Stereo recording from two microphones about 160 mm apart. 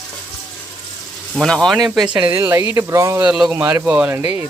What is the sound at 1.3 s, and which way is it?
Speech, 5° left (ahead or behind).